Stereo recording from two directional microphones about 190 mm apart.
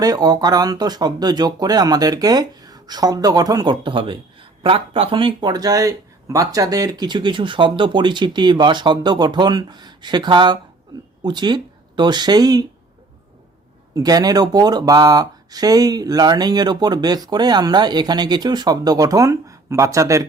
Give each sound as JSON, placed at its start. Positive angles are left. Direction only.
{"t": 0.0, "sound": "speech", "side_deg": -20}
{"t": 13.9, "sound": "speech", "side_deg": -20}